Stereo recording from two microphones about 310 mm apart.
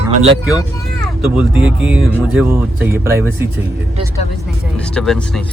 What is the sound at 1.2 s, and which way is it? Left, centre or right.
Speech, centre.